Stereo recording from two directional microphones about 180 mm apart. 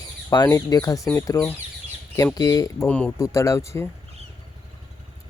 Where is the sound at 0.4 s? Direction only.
15° left (ahead or behind).